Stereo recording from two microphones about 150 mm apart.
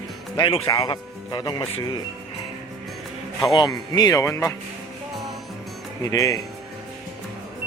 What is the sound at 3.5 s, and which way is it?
Speech, 25° left (ahead or behind).